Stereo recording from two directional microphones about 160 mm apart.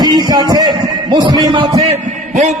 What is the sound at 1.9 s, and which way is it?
Speech, 45° right (ahead or behind).